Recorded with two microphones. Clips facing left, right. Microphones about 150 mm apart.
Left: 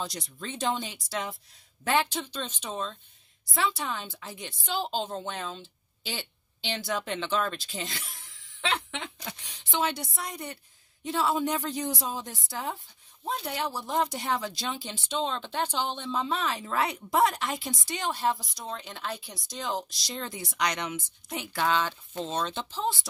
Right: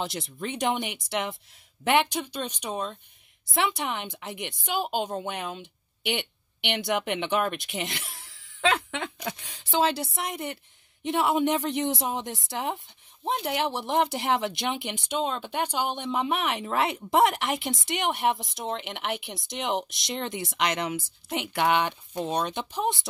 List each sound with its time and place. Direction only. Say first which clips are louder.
0.0 s a woman's voice: right 4 dB; 25° right (ahead or behind)
8.2 s laughter: right 3 dB; 90° right
9.5 s a woman's voice: right 5 dB; 40° right (ahead or behind); by 23.0 s 20° right (ahead or behind)